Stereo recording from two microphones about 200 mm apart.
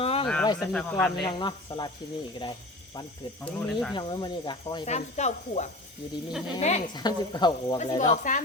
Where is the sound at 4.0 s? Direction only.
25° left (ahead or behind).